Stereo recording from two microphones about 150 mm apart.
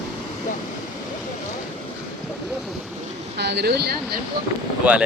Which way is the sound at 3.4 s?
90° right.